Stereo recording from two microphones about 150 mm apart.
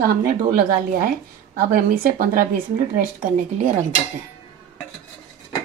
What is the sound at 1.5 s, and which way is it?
A woman's voice, 70° right (ahead or behind).